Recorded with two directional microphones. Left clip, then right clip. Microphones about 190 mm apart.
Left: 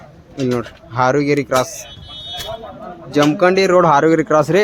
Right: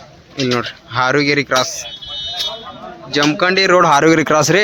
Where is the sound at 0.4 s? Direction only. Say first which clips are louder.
Right 2 dB; 5° left (ahead or behind).